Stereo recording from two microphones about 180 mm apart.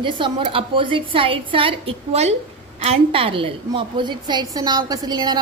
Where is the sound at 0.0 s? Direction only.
30° right (ahead or behind).